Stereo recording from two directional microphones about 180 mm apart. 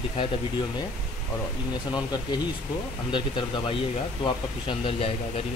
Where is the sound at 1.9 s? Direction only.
20° left (ahead or behind).